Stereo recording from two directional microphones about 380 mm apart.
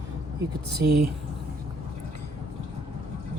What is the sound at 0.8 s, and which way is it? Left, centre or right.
Speech, right.